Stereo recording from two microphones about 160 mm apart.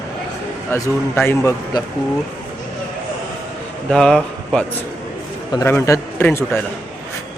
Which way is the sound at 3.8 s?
5° left (ahead or behind).